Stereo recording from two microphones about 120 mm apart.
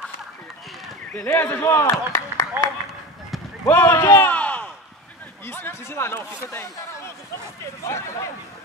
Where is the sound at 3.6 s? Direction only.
15° left (ahead or behind).